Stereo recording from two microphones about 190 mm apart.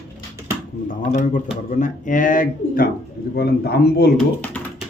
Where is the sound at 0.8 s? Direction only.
40° left (ahead or behind).